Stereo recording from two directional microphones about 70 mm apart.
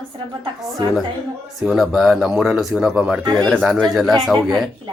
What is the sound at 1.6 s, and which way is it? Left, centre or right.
Speech, centre.